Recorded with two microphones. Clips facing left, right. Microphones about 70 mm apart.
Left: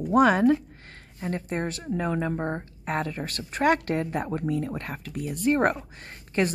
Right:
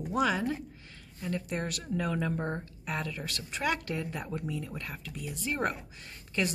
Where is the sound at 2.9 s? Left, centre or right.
Left.